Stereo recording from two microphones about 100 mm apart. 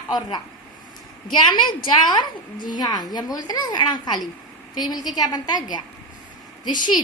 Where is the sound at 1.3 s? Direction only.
50° left (ahead or behind).